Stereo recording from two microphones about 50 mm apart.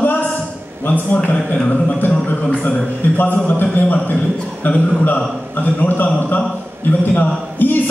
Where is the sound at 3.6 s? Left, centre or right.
Left.